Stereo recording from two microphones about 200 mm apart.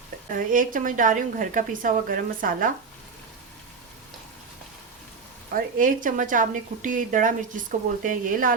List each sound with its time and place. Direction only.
0.3 s speech: 45° right (ahead or behind)
5.5 s a woman's voice: 40° right (ahead or behind)